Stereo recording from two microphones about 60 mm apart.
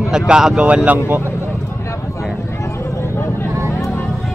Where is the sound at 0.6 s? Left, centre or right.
Right.